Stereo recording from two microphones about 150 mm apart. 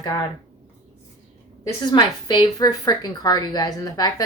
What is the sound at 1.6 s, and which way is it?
A woman's voice, 30° left (ahead or behind).